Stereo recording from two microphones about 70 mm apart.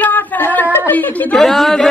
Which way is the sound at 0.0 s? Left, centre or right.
Left.